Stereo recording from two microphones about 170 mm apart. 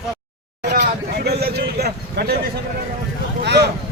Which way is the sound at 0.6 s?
80° right.